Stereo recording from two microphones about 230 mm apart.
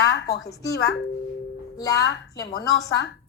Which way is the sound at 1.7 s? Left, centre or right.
Centre.